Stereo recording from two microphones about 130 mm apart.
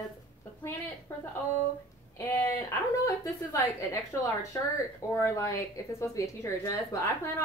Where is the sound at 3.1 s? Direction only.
20° left (ahead or behind).